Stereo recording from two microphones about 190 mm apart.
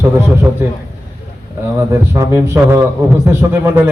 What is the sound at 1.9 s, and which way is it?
A man's voice, 15° right (ahead or behind).